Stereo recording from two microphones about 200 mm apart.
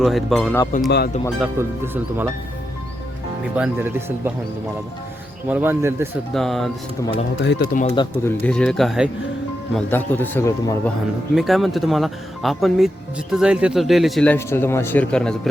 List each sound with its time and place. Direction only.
0.0 s a man's voice: centre (ahead or behind)
0.9 s speech: 55° left (ahead or behind)
1.4 s speech: 10° right (ahead or behind)
3.5 s speech: 10° right (ahead or behind)
5.5 s speech: 10° right (ahead or behind)
6.3 s a man's voice: centre (ahead or behind)
7.4 s speech: 60° left (ahead or behind)
7.7 s speech: 40° left (ahead or behind)
7.9 s a man's voice: 10° left (ahead or behind)
11.3 s a man's voice: centre (ahead or behind)